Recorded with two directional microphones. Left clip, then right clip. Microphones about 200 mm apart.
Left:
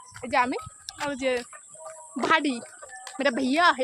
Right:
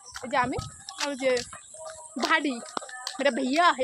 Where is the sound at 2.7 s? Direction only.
50° right (ahead or behind).